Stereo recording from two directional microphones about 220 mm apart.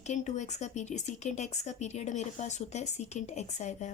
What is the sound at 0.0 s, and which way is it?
Speech, 30° left (ahead or behind).